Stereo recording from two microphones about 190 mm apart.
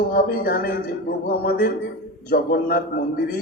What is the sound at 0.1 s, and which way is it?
A man's voice, 50° left (ahead or behind).